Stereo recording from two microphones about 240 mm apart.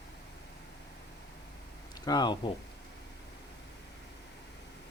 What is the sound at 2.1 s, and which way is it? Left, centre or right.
Speech, centre.